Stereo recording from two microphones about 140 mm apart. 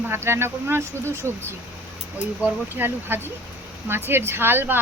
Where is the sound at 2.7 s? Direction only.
15° right (ahead or behind).